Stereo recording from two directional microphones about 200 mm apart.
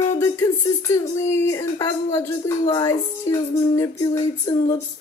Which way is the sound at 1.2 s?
15° left (ahead or behind).